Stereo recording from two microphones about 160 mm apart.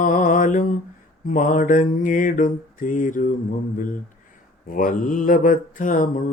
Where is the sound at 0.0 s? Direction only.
55° left (ahead or behind).